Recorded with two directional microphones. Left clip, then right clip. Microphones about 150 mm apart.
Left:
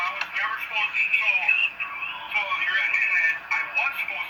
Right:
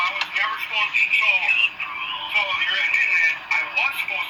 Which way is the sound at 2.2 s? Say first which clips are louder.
Right 4 dB; 30° right (ahead or behind).